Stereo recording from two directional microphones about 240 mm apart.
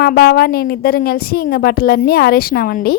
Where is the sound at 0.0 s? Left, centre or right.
Left.